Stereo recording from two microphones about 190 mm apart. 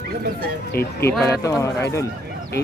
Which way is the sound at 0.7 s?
50° left (ahead or behind).